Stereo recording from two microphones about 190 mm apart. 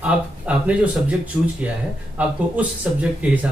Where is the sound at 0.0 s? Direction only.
5° right (ahead or behind).